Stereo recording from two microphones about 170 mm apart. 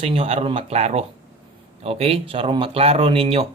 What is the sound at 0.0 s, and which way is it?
Speech, 35° right (ahead or behind).